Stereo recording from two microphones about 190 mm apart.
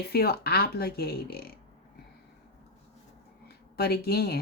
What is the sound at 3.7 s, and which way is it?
Speech, 55° left (ahead or behind).